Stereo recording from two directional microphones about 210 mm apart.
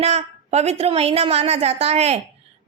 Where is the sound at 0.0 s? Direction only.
30° right (ahead or behind).